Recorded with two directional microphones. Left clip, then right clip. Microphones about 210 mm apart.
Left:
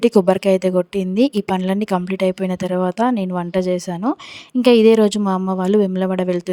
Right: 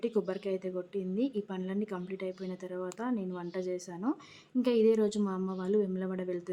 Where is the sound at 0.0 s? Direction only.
50° left (ahead or behind).